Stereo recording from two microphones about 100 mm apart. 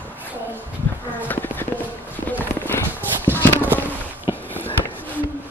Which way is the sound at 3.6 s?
20° right (ahead or behind).